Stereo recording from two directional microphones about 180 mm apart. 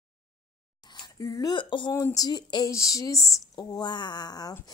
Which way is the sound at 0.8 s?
25° left (ahead or behind).